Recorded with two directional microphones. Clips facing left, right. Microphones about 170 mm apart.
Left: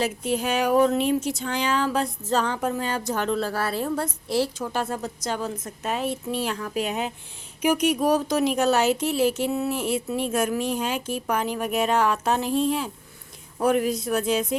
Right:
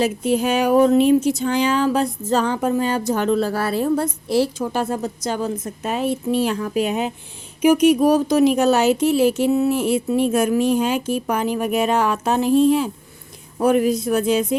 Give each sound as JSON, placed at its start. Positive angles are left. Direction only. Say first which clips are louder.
{"t": 0.0, "sound": "speech", "louder": "right 6 dB", "side_deg": -10}
{"t": 6.6, "sound": "speech", "louder": "right 6 dB", "side_deg": -15}